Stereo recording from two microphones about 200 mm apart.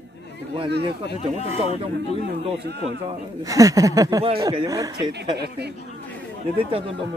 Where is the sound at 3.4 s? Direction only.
15° right (ahead or behind).